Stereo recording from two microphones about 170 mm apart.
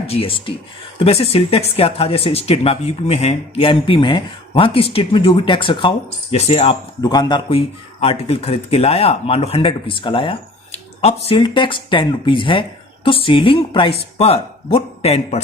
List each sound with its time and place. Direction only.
0.1 s speech: 35° left (ahead or behind)
7.0 s speech: 25° left (ahead or behind)